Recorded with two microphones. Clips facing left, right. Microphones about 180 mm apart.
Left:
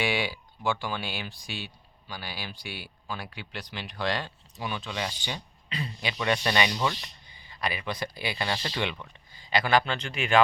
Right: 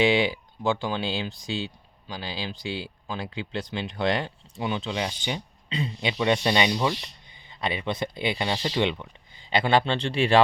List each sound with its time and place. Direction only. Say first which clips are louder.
0.0 s speech: right 7 dB; 20° right (ahead or behind)